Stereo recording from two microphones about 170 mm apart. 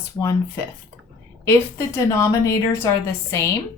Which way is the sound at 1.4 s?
15° left (ahead or behind).